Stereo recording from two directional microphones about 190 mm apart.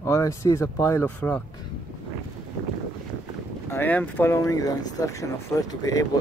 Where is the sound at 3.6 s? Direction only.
10° left (ahead or behind).